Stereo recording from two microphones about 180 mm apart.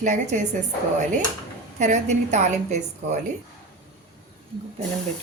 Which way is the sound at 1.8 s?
40° right (ahead or behind).